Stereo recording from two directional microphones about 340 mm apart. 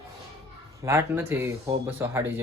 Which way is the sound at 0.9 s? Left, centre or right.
Centre.